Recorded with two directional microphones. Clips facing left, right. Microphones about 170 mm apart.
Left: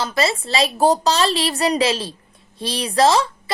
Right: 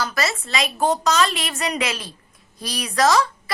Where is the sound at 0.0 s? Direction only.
25° left (ahead or behind).